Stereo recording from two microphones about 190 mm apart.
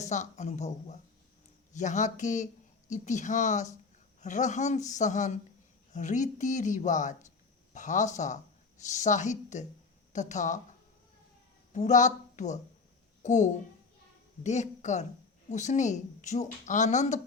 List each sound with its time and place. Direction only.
0.0 s a woman's voice: 40° left (ahead or behind)
11.7 s a woman's voice: 40° left (ahead or behind)